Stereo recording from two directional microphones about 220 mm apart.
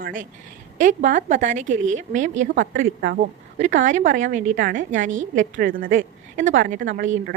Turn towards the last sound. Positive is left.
turn(degrees=-35)  # may be behind; listen again after turning